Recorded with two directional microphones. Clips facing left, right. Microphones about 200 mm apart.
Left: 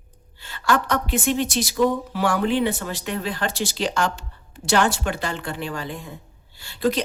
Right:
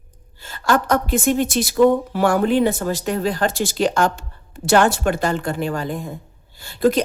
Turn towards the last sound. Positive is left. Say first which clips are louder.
# right 5 dB
turn(degrees=-50)  # may be behind; listen again after turning